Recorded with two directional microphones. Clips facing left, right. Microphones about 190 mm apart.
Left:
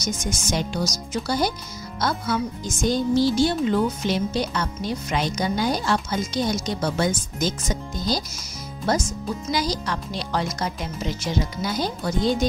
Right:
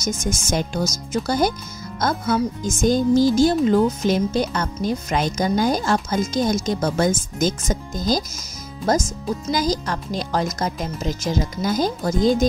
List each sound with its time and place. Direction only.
0.0 s speech: 50° right (ahead or behind)